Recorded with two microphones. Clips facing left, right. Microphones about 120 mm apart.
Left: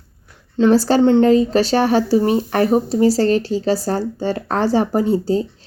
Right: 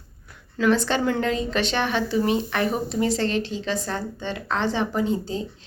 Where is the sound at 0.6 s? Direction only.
35° left (ahead or behind).